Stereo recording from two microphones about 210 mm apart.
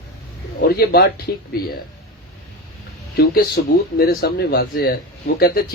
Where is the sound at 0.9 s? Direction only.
50° left (ahead or behind).